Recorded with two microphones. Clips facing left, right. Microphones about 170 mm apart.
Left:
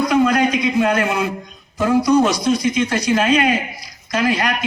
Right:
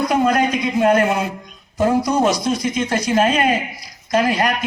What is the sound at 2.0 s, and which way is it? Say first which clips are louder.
A man's voice: left 3 dB; 50° right (ahead or behind).